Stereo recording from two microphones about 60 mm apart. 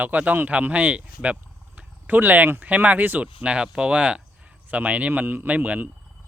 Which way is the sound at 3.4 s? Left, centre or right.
Centre.